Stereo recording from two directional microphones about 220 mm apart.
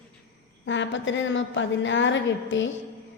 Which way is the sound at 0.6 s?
55° left (ahead or behind).